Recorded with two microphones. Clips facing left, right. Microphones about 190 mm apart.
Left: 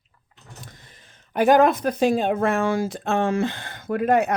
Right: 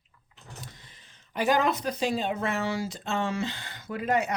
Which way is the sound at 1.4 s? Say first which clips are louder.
Left 8 dB; 55° left (ahead or behind).